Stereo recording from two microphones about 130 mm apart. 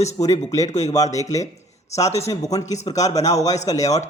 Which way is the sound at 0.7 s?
60° left (ahead or behind).